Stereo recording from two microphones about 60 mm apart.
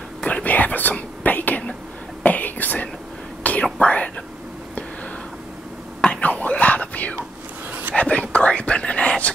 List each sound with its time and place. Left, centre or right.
0.2 s whispering: left
5.9 s whispering: centre